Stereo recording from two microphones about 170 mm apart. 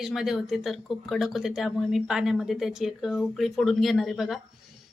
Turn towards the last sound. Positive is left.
turn(degrees=0)  # may be behind; listen again after turning